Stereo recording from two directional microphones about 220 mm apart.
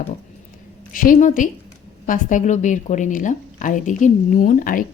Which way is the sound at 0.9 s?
40° left (ahead or behind).